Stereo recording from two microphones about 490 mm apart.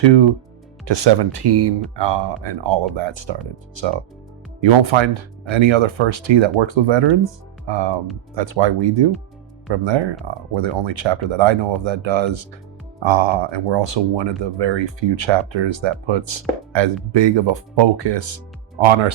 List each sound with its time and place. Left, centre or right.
0.0 s speech: right
18.8 s speech: right